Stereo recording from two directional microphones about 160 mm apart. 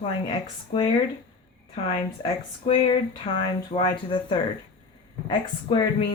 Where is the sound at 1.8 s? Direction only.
30° left (ahead or behind).